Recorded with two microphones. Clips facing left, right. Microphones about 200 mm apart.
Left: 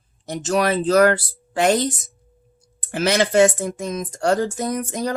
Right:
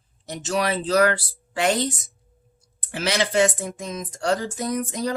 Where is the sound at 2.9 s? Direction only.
50° left (ahead or behind).